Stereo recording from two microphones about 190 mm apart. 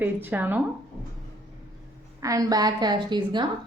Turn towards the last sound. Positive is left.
turn(degrees=-25)  # may be behind; listen again after turning